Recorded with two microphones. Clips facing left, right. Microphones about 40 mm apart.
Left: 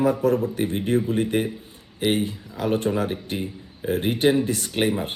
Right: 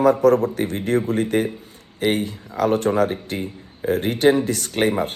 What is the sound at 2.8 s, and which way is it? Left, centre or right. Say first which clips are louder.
Speech: right 5 dB; right.